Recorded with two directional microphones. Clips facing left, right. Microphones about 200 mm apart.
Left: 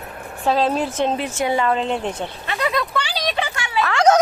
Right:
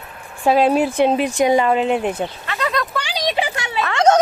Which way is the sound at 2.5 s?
15° left (ahead or behind).